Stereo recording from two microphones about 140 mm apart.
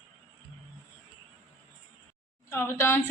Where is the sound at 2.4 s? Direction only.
15° left (ahead or behind).